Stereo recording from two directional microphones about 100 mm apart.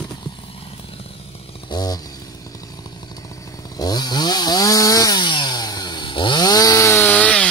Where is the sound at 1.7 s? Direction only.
40° left (ahead or behind).